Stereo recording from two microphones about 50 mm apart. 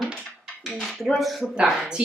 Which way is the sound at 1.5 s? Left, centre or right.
Centre.